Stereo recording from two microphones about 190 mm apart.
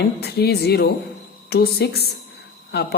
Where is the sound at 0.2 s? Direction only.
55° left (ahead or behind).